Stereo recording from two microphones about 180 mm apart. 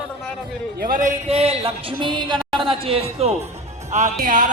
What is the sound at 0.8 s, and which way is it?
Music, 50° right (ahead or behind).